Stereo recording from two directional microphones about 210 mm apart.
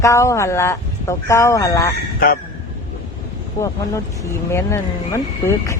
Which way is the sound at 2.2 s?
45° left (ahead or behind).